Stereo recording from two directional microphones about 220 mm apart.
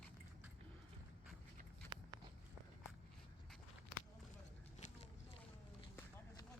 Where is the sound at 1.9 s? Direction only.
20° right (ahead or behind).